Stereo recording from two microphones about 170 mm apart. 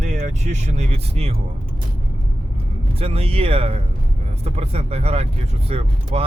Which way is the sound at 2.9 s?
35° right (ahead or behind).